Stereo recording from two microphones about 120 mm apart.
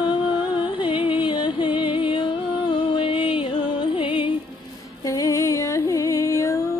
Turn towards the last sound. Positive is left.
turn(degrees=25)  # may be behind; listen again after turning